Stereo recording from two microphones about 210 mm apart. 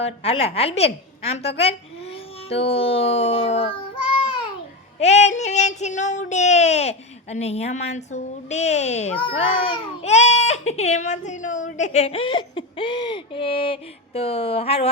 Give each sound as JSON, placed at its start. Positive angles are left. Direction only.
{"t": 0.0, "sound": "speech", "side_deg": 30}
{"t": 4.9, "sound": "child singing", "side_deg": 30}
{"t": 12.3, "sound": "speech", "side_deg": 25}